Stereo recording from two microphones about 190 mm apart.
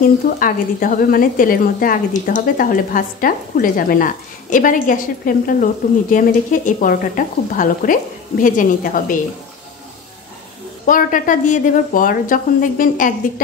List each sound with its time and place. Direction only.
0.4 s a woman's voice: 45° left (ahead or behind)
10.9 s a woman's voice: 45° left (ahead or behind)